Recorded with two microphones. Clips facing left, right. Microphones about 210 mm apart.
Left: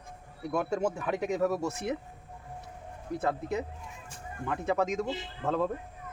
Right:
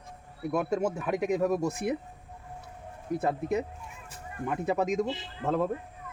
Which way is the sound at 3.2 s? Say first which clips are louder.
Right 2 dB; 20° right (ahead or behind).